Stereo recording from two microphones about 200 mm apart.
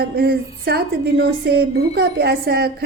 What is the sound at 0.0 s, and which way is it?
A woman's voice, 50° right (ahead or behind).